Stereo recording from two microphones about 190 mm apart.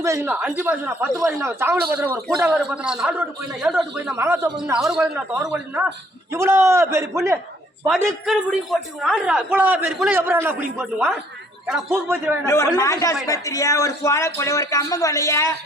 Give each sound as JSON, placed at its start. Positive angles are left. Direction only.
{"t": 0.0, "sound": "a man's voice", "side_deg": -15}
{"t": 3.9, "sound": "a man's voice", "side_deg": -15}
{"t": 4.8, "sound": "a man's voice", "side_deg": 0}
{"t": 5.3, "sound": "a man's voice", "side_deg": -10}
{"t": 8.2, "sound": "a man's voice", "side_deg": 0}
{"t": 12.5, "sound": "speech", "side_deg": 15}